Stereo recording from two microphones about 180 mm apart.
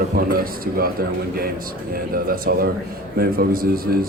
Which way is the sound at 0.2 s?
55° right (ahead or behind).